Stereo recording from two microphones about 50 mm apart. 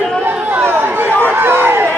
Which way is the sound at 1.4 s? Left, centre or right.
Right.